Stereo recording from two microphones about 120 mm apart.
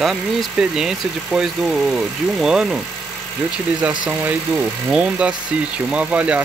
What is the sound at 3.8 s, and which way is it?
Speech, 10° right (ahead or behind).